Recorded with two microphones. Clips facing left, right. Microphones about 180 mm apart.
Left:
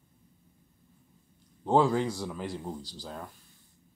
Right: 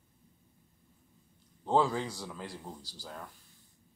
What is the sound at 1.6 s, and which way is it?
A man's voice, 15° left (ahead or behind).